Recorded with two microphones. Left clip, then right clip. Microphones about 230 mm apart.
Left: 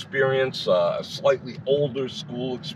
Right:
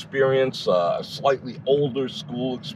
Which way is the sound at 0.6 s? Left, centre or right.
Right.